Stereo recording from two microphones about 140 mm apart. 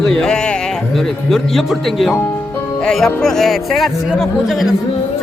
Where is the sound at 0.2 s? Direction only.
5° left (ahead or behind).